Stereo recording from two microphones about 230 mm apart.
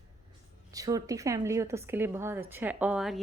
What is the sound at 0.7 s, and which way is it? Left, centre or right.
A woman's voice, centre.